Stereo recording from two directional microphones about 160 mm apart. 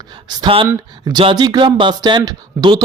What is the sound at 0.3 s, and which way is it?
Speech, 30° right (ahead or behind).